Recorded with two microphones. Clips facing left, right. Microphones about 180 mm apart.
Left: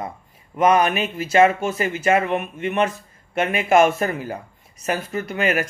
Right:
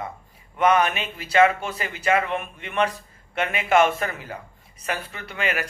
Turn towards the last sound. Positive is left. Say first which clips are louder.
# left 6 dB
turn(degrees=40)  # may be behind; listen again after turning